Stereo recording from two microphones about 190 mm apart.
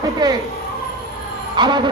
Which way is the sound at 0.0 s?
20° right (ahead or behind).